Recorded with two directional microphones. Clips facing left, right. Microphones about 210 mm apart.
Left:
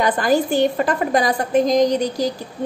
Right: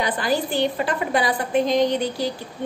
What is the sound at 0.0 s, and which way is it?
A woman's voice, 45° left (ahead or behind).